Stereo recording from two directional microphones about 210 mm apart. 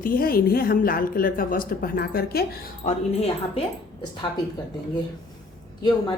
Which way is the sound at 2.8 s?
35° left (ahead or behind).